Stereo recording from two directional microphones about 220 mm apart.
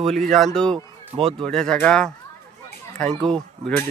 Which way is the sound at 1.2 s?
25° right (ahead or behind).